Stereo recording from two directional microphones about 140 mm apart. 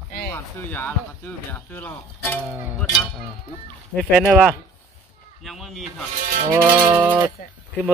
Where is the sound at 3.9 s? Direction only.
Centre (ahead or behind).